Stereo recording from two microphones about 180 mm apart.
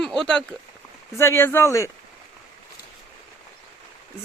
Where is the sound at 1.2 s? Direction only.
15° left (ahead or behind).